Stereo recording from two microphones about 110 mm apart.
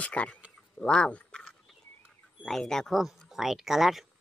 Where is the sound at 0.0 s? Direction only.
10° left (ahead or behind).